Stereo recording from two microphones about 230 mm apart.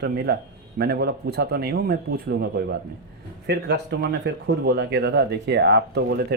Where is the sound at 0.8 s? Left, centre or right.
Right.